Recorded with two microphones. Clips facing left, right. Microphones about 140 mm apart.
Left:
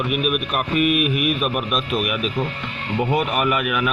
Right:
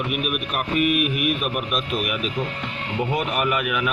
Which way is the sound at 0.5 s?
75° left (ahead or behind).